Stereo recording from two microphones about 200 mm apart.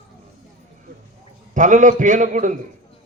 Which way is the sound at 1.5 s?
40° right (ahead or behind).